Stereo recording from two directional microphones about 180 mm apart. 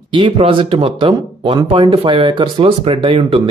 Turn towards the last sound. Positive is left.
turn(degrees=-30)  # may be behind; listen again after turning